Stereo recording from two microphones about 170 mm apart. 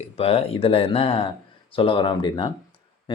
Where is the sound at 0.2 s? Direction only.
35° left (ahead or behind).